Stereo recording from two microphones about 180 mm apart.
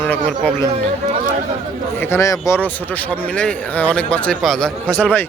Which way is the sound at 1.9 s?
15° left (ahead or behind).